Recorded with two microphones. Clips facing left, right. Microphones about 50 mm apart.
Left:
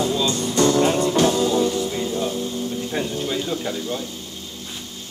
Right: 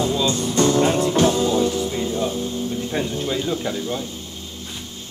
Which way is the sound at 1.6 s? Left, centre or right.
Centre.